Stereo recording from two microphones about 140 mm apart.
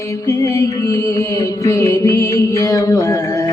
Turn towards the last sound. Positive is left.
turn(degrees=25)  # may be behind; listen again after turning